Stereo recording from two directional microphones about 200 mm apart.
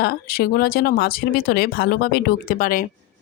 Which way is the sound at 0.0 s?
50° left (ahead or behind).